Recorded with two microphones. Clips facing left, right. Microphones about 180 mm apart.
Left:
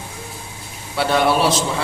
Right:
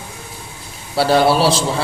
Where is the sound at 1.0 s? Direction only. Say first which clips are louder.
Right 3 dB; 35° right (ahead or behind).